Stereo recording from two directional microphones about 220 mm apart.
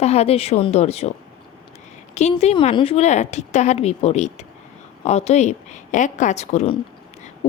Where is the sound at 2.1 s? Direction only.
30° left (ahead or behind).